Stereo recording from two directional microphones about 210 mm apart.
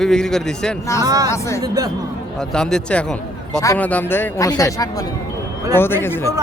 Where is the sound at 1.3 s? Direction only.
15° left (ahead or behind).